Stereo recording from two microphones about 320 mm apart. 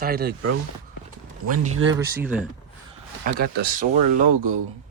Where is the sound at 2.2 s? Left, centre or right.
Centre.